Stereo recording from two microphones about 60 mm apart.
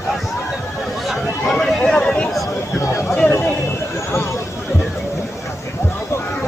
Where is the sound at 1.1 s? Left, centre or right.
Centre.